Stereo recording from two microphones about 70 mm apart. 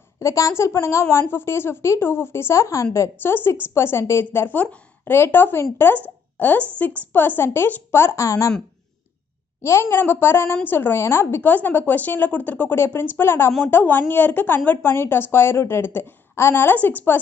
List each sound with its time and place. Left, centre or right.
0.2 s a woman's voice: left
3.2 s a woman's voice: left
4.6 s a woman's voice: left
5.1 s a woman's voice: left
6.0 s a sound: left
7.1 s a woman's voice: left
8.3 s speech: left
9.6 s a woman's voice: left
11.4 s speech: left
12.7 s a woman's voice: left